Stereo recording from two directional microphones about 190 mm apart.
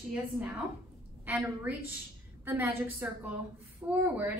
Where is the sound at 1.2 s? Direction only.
10° right (ahead or behind).